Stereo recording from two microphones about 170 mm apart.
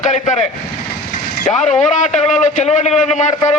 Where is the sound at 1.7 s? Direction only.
45° left (ahead or behind).